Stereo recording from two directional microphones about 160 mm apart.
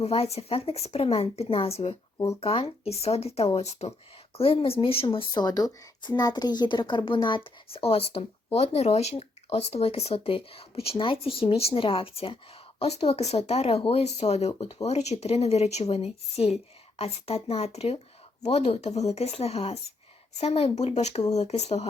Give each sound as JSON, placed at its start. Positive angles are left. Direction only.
{"t": 0.0, "sound": "speech", "side_deg": 40}